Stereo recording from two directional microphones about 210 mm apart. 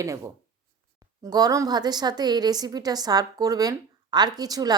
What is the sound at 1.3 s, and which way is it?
A woman's voice, 15° right (ahead or behind).